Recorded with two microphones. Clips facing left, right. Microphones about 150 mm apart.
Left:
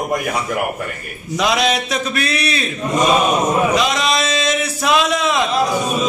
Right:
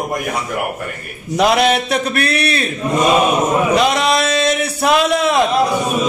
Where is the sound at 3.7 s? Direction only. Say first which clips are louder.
Right 3 dB; 55° right (ahead or behind).